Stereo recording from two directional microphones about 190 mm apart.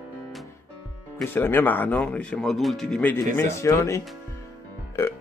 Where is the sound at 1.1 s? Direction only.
10° left (ahead or behind).